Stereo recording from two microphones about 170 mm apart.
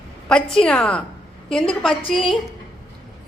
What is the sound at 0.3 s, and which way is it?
Speech, 5° left (ahead or behind).